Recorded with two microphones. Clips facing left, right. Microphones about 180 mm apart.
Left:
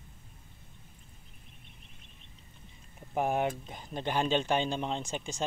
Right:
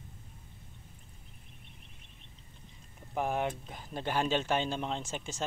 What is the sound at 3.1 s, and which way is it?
Speech, 5° left (ahead or behind).